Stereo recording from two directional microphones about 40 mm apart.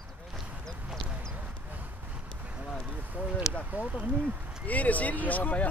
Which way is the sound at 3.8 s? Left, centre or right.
Right.